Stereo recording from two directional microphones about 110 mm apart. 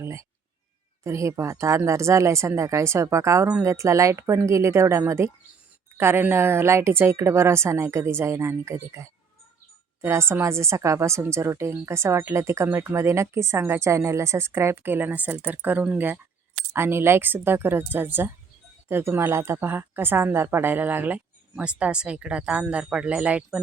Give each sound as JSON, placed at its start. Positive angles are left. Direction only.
{"t": 0.0, "sound": "speech", "side_deg": -25}